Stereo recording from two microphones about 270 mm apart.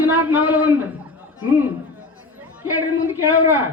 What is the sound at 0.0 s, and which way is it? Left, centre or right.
Music, centre.